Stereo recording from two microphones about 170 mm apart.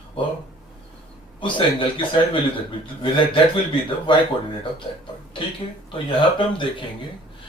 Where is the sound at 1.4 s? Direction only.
30° left (ahead or behind).